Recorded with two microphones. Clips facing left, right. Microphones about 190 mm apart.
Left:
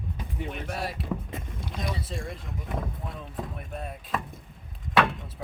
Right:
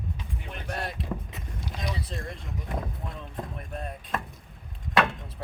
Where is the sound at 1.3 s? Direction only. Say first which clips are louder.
Left 2 dB; 50° left (ahead or behind).